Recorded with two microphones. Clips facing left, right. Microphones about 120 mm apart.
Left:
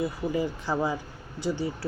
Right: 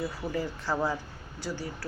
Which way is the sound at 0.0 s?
15° left (ahead or behind).